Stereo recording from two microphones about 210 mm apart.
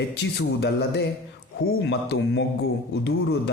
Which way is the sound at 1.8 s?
55° left (ahead or behind).